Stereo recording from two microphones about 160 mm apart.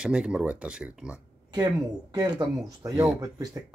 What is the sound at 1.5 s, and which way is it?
Speech, 25° right (ahead or behind).